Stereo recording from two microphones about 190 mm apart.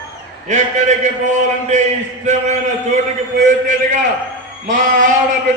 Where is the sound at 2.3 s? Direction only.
40° right (ahead or behind).